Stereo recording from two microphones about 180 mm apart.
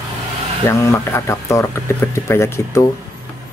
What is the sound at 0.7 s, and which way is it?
Speech, 15° left (ahead or behind).